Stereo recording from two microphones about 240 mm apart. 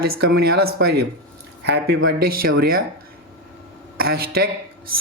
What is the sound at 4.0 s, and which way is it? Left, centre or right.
Speech, right.